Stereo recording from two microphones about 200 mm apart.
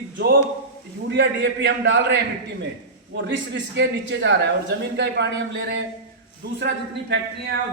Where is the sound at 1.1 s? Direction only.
60° right (ahead or behind).